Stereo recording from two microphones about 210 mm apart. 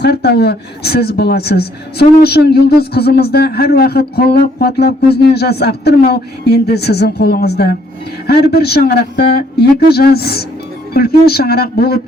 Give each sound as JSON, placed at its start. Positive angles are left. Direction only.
{"t": 0.0, "sound": "a woman's voice", "side_deg": 50}